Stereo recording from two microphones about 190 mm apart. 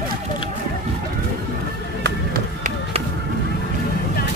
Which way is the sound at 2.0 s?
50° right (ahead or behind).